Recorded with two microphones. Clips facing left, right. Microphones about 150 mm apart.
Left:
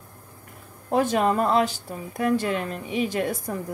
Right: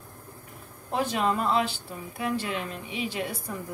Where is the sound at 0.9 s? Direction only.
45° left (ahead or behind).